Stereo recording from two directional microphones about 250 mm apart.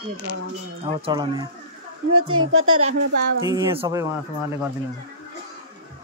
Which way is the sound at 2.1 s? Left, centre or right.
Right.